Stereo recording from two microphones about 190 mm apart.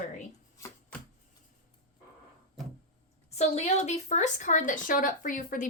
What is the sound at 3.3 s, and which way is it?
A woman's voice, 35° left (ahead or behind).